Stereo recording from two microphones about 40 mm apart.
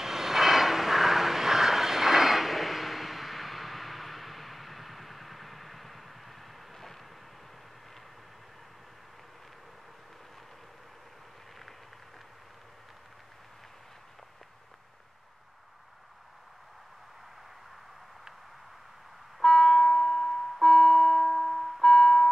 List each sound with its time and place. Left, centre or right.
0.0 s vehicle: centre
19.4 s a sound: centre
21.8 s music: centre